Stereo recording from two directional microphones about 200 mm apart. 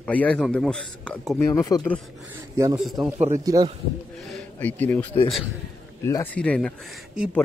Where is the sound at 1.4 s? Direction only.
15° left (ahead or behind).